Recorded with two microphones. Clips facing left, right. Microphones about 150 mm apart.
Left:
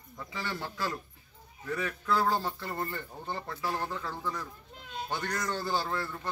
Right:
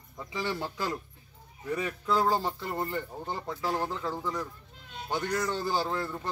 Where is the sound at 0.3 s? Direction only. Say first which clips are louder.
Right 5 dB; 15° right (ahead or behind).